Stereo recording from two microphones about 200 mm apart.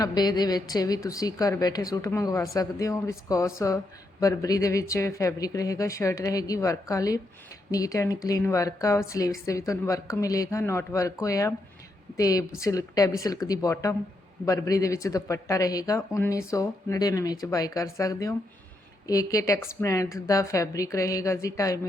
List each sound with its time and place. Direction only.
0.0 s speech: 20° left (ahead or behind)